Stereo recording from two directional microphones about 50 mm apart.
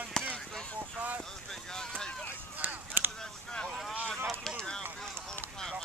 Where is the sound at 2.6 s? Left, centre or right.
Right.